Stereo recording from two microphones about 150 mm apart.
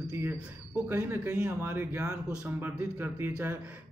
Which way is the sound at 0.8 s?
15° right (ahead or behind).